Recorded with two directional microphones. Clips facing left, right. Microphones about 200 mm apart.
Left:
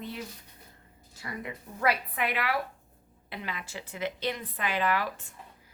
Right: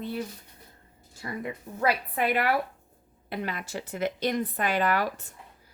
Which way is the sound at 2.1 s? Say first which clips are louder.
Right 5 dB; 45° right (ahead or behind).